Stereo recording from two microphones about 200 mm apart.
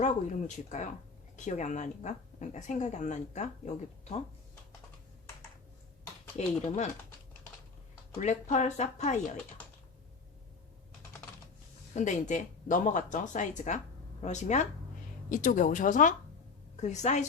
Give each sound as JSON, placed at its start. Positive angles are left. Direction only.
{"t": 0.0, "sound": "speech", "side_deg": 35}
{"t": 6.3, "sound": "speech", "side_deg": 35}
{"t": 8.2, "sound": "speech", "side_deg": 35}
{"t": 11.9, "sound": "speech", "side_deg": 40}